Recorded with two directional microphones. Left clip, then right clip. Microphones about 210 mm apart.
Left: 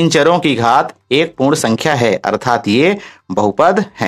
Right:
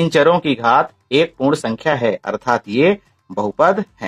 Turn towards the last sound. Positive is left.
turn(degrees=30)  # may be behind; listen again after turning